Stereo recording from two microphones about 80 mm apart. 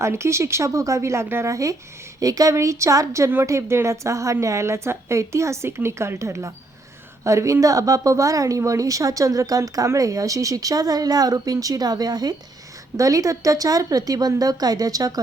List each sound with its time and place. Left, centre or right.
0.0 s a woman's voice: right